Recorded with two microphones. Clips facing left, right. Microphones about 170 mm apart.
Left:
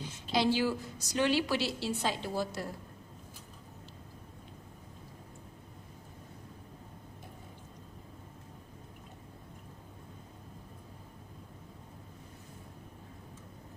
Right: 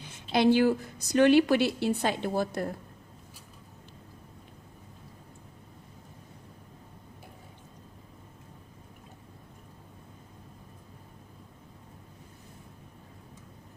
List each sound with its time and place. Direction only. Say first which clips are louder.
0.0 s a woman's voice: right 6 dB; 55° right (ahead or behind)